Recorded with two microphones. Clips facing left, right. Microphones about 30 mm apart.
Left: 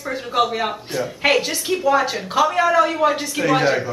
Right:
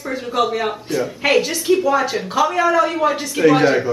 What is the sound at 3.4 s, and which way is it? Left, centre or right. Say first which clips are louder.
Speech: right 5 dB; centre.